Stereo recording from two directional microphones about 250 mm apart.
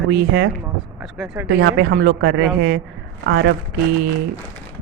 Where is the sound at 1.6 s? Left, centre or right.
Right.